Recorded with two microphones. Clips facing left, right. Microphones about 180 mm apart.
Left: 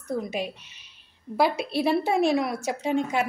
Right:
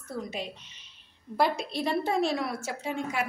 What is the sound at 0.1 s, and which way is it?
A woman's voice, 10° left (ahead or behind).